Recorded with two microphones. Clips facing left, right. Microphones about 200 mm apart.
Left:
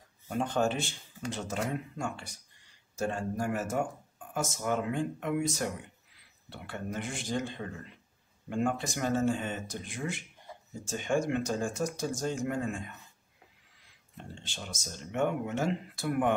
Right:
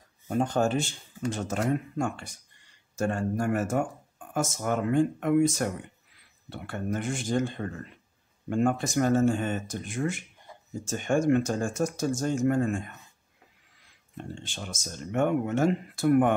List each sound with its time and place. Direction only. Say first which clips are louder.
0.3 s speech: right 4 dB; 45° right (ahead or behind)
14.1 s speech: right 6 dB; 50° right (ahead or behind)